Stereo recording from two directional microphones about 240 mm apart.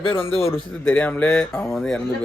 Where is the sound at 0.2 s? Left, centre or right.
Left.